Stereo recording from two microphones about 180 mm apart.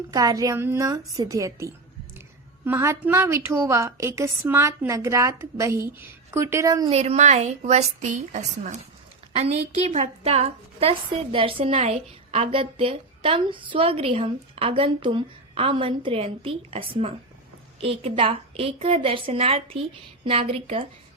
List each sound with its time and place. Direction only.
0.1 s a woman's voice: 20° right (ahead or behind)
6.9 s a woman's voice: 35° right (ahead or behind)